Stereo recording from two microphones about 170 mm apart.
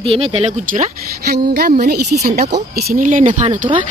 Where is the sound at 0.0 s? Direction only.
35° right (ahead or behind).